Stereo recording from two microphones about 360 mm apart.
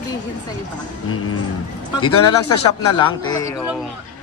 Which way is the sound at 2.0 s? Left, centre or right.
Left.